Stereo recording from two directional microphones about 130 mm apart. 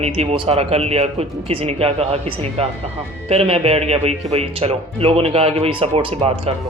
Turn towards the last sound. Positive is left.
turn(degrees=-50)  # may be behind; listen again after turning